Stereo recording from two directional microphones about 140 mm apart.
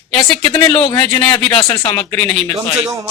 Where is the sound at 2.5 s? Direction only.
25° right (ahead or behind).